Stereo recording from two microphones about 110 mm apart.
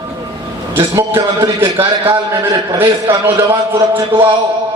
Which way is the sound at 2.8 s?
20° right (ahead or behind).